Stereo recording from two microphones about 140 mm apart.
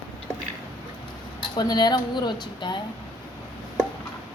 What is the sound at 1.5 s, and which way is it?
Speech, 30° left (ahead or behind).